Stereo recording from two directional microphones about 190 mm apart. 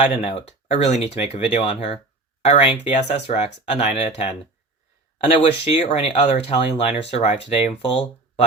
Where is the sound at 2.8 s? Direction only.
35° left (ahead or behind).